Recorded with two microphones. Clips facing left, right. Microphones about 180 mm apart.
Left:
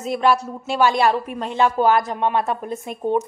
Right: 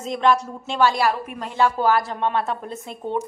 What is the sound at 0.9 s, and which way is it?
A woman's voice, 25° left (ahead or behind).